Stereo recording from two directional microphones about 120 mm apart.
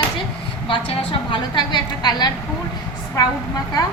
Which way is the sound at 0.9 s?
40° left (ahead or behind).